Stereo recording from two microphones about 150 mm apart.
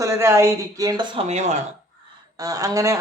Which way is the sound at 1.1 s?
50° right (ahead or behind).